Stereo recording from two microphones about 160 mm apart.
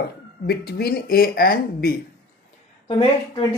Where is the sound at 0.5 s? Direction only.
75° left (ahead or behind).